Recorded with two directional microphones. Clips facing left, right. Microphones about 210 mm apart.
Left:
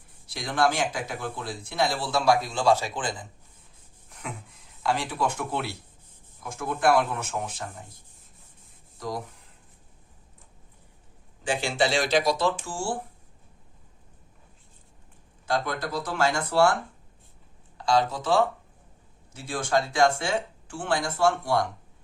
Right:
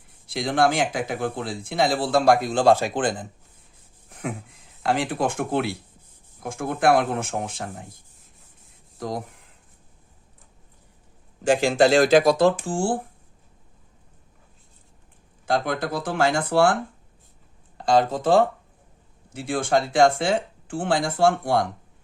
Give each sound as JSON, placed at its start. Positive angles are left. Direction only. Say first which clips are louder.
{"t": 0.3, "sound": "speech", "louder": "right 4 dB", "side_deg": -55}
{"t": 4.1, "sound": "a sound", "louder": "right 8 dB", "side_deg": -55}
{"t": 4.8, "sound": "speech", "louder": "right 4 dB", "side_deg": -55}
{"t": 9.0, "sound": "speech", "louder": "right 3 dB", "side_deg": -50}
{"t": 11.6, "sound": "speech", "louder": "right 8 dB", "side_deg": -45}
{"t": 15.4, "sound": "speech", "louder": "right 4 dB", "side_deg": -55}
{"t": 17.7, "sound": "speech", "louder": "right 4 dB", "side_deg": -55}